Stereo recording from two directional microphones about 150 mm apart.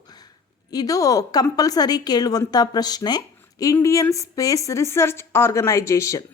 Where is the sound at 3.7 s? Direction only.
20° left (ahead or behind).